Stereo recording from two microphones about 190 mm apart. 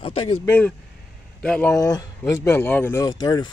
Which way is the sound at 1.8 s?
20° left (ahead or behind).